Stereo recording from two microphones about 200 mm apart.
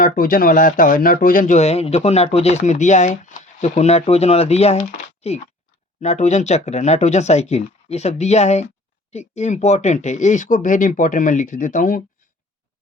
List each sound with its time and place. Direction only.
0.0 s speech: 45° left (ahead or behind)